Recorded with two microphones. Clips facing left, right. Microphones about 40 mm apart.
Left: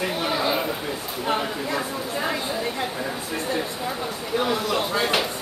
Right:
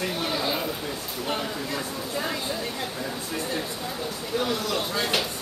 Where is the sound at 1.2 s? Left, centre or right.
Centre.